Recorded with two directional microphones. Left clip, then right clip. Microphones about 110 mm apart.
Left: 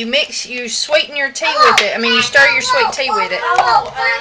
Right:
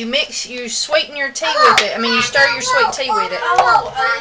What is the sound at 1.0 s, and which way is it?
A woman's voice, 30° left (ahead or behind).